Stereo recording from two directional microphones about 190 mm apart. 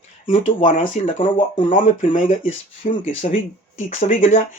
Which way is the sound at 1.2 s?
25° left (ahead or behind).